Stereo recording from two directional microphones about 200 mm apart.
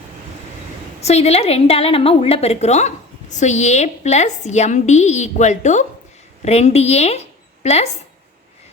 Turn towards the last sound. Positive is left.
turn(degrees=30)  # may be behind; listen again after turning